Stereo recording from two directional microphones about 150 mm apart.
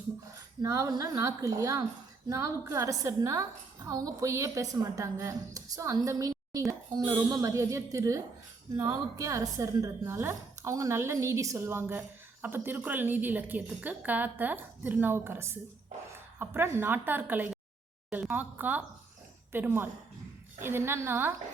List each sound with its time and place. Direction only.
0.6 s a woman's voice: 20° right (ahead or behind)